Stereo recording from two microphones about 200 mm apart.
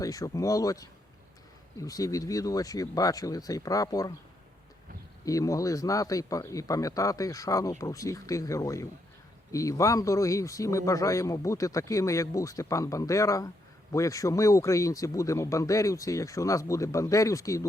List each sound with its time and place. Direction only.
0.0 s speech: 15° left (ahead or behind)
5.2 s speech: 15° left (ahead or behind)